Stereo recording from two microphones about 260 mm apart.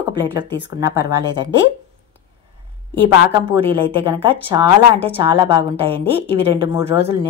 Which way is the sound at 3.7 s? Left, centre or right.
Centre.